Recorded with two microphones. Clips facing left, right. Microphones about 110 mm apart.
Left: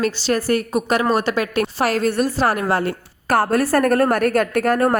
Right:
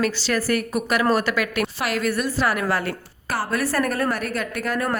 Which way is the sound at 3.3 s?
45° left (ahead or behind).